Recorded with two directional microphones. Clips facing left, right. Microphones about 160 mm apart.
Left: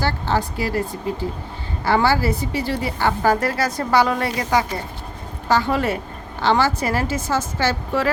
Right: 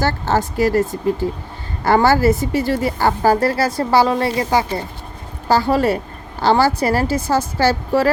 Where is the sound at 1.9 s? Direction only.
45° right (ahead or behind).